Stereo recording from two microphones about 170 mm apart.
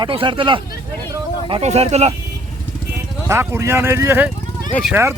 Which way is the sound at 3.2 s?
15° right (ahead or behind).